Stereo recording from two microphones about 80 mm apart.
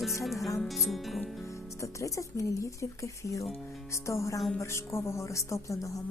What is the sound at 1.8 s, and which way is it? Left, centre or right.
A woman's voice, left.